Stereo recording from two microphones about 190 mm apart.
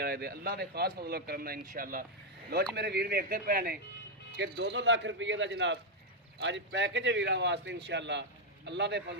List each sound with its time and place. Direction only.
0.0 s speech: 55° right (ahead or behind)
2.5 s speech: 60° right (ahead or behind)
4.4 s a man's voice: 65° right (ahead or behind)